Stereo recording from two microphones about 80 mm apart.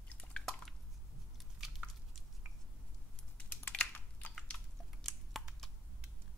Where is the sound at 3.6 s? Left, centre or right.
Left.